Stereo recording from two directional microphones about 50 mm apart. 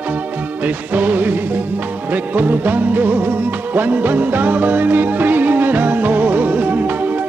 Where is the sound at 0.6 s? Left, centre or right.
Right.